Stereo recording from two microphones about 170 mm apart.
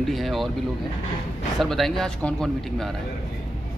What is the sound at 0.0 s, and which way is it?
Speech, centre (ahead or behind).